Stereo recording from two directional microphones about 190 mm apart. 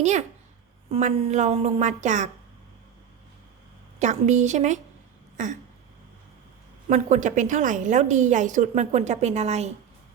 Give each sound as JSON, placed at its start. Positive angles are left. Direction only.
{"t": 0.0, "sound": "a woman's voice", "side_deg": -35}
{"t": 4.0, "sound": "a woman's voice", "side_deg": -40}
{"t": 6.8, "sound": "a woman's voice", "side_deg": -40}